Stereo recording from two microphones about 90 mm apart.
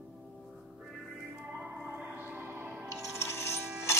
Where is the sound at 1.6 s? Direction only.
15° right (ahead or behind).